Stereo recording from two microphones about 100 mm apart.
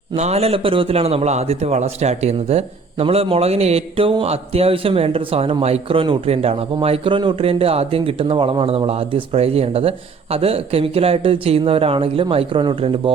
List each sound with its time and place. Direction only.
0.2 s a man's voice: 90° right; by 7.4 s 55° right (ahead or behind)
7.4 s speech: 80° right; by 13.1 s 60° right (ahead or behind)